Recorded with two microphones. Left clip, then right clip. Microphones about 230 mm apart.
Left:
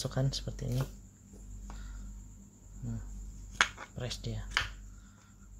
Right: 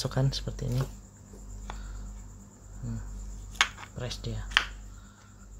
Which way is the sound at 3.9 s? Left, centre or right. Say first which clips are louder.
Right 3 dB; centre.